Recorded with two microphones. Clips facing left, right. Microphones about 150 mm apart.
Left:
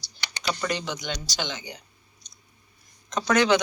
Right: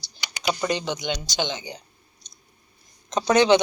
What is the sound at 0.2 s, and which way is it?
A woman's voice, 15° right (ahead or behind).